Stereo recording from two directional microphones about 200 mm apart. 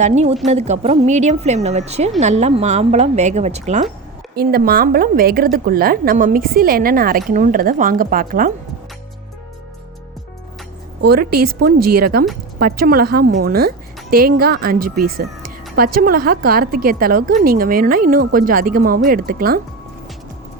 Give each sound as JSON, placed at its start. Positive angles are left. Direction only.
{"t": 0.0, "sound": "a woman's voice", "side_deg": -35}
{"t": 4.4, "sound": "a woman's voice", "side_deg": -50}
{"t": 11.1, "sound": "a woman's voice", "side_deg": -50}